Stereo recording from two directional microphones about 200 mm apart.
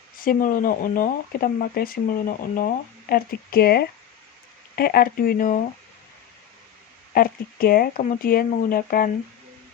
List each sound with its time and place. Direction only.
0.2 s speech: 45° left (ahead or behind)
7.1 s speech: 45° left (ahead or behind)